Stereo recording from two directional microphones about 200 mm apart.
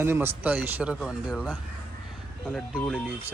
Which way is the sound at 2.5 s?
Centre (ahead or behind).